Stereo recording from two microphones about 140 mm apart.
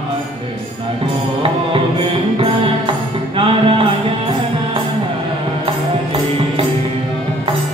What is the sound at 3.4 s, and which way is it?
Music, 40° right (ahead or behind).